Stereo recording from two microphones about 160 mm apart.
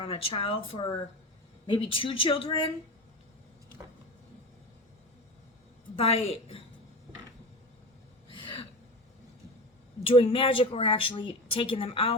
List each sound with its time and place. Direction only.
0.0 s a woman's voice: 35° left (ahead or behind)
6.0 s a woman's voice: 35° left (ahead or behind)
8.3 s gasp: 30° left (ahead or behind)
10.1 s a woman's voice: 35° left (ahead or behind)